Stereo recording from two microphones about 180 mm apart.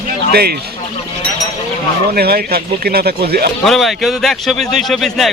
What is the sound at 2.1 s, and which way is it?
Speech, 60° right (ahead or behind).